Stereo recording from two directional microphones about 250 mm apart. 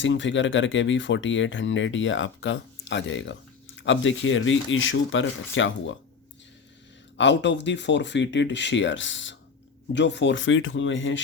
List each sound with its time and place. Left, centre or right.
0.0 s speech: left
7.2 s speech: left